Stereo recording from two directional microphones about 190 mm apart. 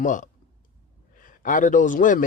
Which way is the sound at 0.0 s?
40° left (ahead or behind).